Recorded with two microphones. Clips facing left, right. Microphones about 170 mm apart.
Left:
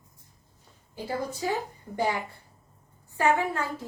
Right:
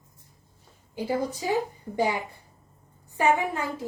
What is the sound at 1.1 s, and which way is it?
Speech, 15° right (ahead or behind).